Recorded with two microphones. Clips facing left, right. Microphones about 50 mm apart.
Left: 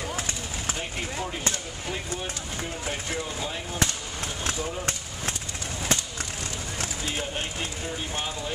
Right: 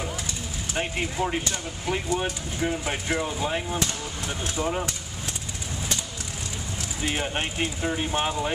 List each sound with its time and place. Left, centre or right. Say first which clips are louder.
0.7 s speech: right 10 dB; right
7.1 s speech: right 6 dB; right